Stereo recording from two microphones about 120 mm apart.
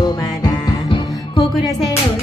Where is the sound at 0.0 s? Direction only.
35° left (ahead or behind).